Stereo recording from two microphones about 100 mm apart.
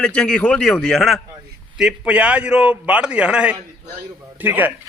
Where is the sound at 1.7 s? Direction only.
10° right (ahead or behind).